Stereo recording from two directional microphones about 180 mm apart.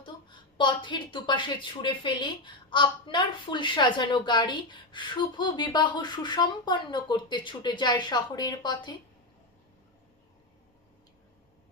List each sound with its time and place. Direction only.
0.0 s a woman's voice: 25° left (ahead or behind)